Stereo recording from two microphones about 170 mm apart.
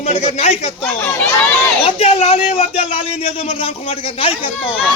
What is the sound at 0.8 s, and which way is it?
Speech, 15° left (ahead or behind).